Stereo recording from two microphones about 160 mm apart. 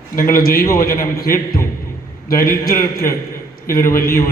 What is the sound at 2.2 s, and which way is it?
Speech, 65° left (ahead or behind).